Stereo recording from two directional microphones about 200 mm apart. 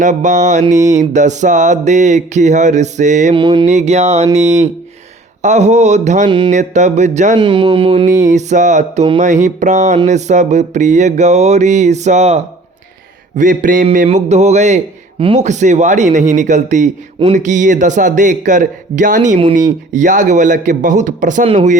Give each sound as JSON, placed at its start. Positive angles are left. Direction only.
{"t": 0.0, "sound": "speech", "side_deg": -40}
{"t": 3.3, "sound": "speech", "side_deg": -20}
{"t": 3.7, "sound": "speech", "side_deg": -35}
{"t": 6.2, "sound": "speech", "side_deg": -25}
{"t": 6.5, "sound": "speech", "side_deg": -35}
{"t": 7.3, "sound": "speech", "side_deg": -25}
{"t": 8.3, "sound": "speech", "side_deg": -35}